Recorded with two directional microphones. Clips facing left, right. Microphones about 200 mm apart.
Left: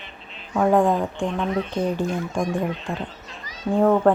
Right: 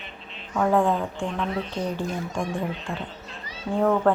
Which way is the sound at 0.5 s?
15° left (ahead or behind).